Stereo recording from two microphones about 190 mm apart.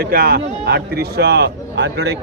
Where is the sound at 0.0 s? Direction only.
55° right (ahead or behind).